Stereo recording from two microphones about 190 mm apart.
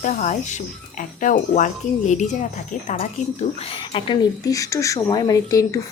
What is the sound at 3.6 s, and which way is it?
A woman's voice, 30° left (ahead or behind).